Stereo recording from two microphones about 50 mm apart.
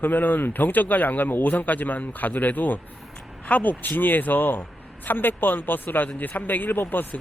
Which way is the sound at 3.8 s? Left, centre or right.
Left.